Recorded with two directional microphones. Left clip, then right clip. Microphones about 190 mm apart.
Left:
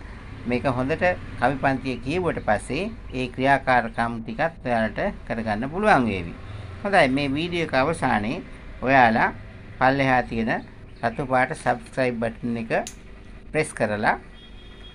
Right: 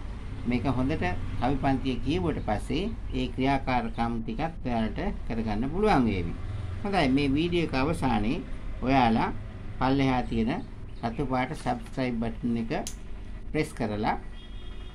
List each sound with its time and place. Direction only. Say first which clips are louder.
0.5 s speech: left 6 dB; 20° left (ahead or behind)